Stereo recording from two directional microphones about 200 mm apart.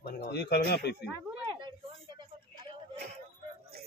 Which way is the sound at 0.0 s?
50° left (ahead or behind).